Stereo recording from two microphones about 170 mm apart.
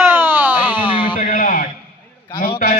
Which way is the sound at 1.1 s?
45° left (ahead or behind).